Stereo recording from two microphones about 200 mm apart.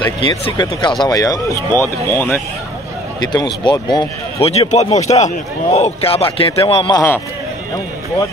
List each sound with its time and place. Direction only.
0.3 s speech: 20° left (ahead or behind)
3.2 s a man's voice: 20° left (ahead or behind)
4.6 s a man's voice: 30° left (ahead or behind)